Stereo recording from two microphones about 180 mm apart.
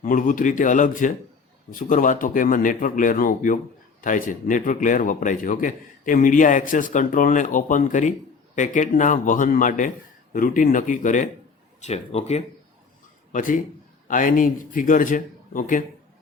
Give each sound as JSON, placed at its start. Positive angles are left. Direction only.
{"t": 0.0, "sound": "speech", "side_deg": 50}
{"t": 13.3, "sound": "speech", "side_deg": 45}